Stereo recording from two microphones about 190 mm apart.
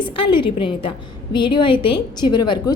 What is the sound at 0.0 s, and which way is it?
A woman's voice, 25° left (ahead or behind).